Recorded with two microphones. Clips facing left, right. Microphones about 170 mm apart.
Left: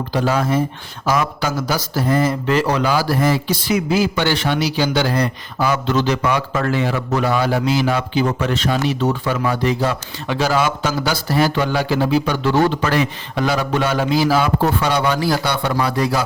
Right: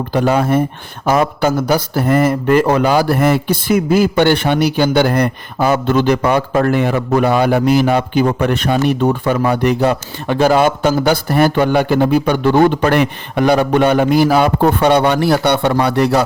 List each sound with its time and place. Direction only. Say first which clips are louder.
0.1 s speech: right 5 dB; 60° right (ahead or behind)